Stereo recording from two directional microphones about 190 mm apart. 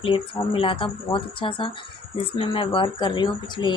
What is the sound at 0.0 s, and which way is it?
Speech, 30° left (ahead or behind).